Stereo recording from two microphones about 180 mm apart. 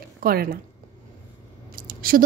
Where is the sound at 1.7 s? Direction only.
55° right (ahead or behind).